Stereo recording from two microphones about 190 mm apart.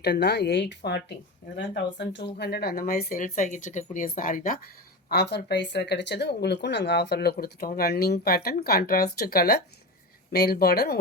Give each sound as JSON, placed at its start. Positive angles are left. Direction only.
{"t": 0.0, "sound": "speech", "side_deg": 60}
{"t": 5.0, "sound": "speech", "side_deg": 55}